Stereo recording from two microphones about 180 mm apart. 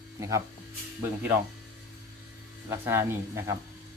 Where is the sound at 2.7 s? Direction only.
15° right (ahead or behind).